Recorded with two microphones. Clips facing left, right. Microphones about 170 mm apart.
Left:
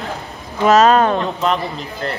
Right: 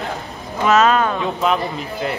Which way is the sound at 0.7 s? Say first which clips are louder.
Left 3 dB; 40° left (ahead or behind).